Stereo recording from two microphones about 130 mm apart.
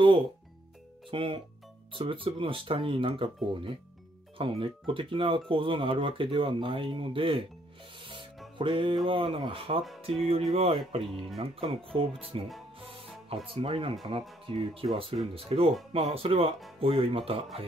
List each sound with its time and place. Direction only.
1.1 s music: 40° right (ahead or behind)
2.0 s speech: 40° right (ahead or behind)
8.5 s music: 40° right (ahead or behind)
10.0 s speech: 50° right (ahead or behind)
12.8 s music: 45° right (ahead or behind)
13.5 s speech: 45° right (ahead or behind)